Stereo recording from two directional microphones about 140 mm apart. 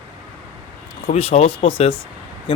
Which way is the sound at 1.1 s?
45° left (ahead or behind).